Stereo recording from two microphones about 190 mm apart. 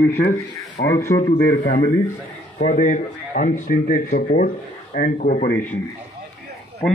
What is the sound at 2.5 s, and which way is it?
Speech, 45° left (ahead or behind).